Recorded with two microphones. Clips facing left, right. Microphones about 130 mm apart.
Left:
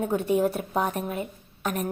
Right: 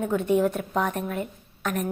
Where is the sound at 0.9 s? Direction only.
15° left (ahead or behind).